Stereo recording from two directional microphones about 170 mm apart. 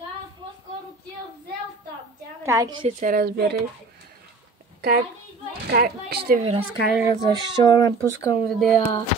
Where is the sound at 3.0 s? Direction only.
55° right (ahead or behind).